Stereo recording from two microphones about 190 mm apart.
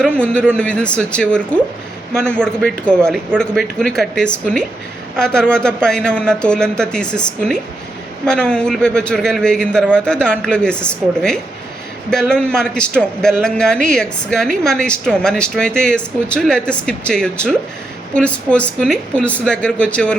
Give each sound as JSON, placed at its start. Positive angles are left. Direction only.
{"t": 0.0, "sound": "a man's voice", "side_deg": 5}